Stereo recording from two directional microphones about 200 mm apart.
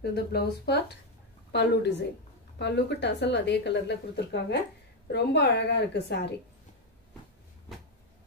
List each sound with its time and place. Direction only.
0.0 s a woman's voice: 55° left (ahead or behind)